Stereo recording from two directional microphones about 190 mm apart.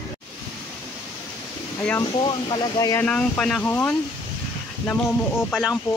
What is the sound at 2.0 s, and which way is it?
Speech, 25° left (ahead or behind).